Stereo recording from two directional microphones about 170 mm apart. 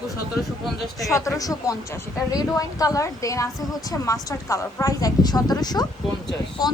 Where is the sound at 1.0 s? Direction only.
20° left (ahead or behind).